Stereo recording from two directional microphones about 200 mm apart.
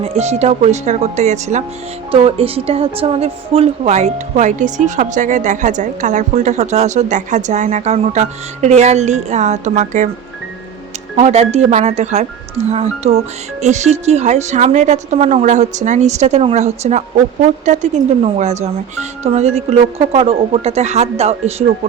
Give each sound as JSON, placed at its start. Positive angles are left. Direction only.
{"t": 0.0, "sound": "a woman's voice", "side_deg": -30}
{"t": 11.2, "sound": "a woman's voice", "side_deg": -30}